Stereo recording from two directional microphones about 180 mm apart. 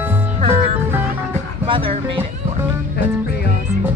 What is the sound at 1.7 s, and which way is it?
Music, 30° right (ahead or behind).